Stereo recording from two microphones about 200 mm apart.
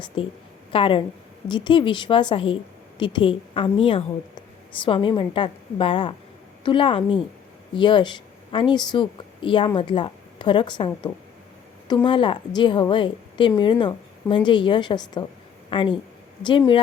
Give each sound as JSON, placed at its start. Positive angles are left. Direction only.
{"t": 0.2, "sound": "a woman's voice", "side_deg": 25}